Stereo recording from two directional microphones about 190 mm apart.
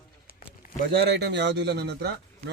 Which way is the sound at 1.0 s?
65° right (ahead or behind).